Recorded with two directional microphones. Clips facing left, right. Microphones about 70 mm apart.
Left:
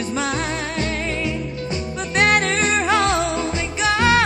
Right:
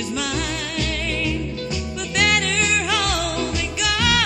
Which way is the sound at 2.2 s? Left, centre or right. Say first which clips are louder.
Left 3 dB; left.